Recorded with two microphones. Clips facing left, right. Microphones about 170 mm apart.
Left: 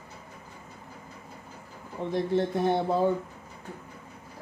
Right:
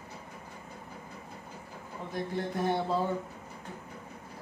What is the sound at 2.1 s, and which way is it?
Speech, 25° left (ahead or behind).